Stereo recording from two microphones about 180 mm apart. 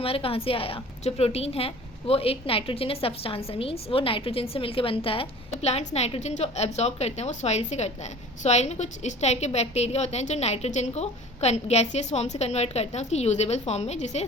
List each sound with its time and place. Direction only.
0.0 s a woman's voice: 30° left (ahead or behind)